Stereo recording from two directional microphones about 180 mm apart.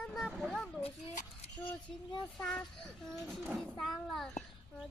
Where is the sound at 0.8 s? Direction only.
30° left (ahead or behind).